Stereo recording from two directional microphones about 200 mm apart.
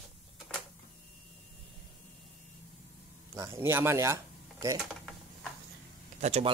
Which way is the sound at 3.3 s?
15° right (ahead or behind).